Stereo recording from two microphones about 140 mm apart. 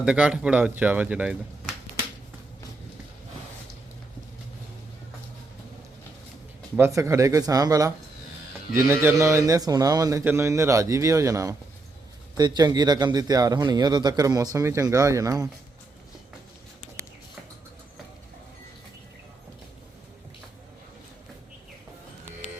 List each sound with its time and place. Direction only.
0.0 s speech: 5° right (ahead or behind)
6.7 s speech: 20° right (ahead or behind)